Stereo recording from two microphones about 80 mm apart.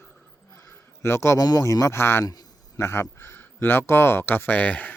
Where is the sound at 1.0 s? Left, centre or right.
Left.